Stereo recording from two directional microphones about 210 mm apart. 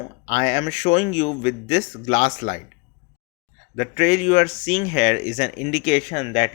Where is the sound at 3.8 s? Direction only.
30° left (ahead or behind).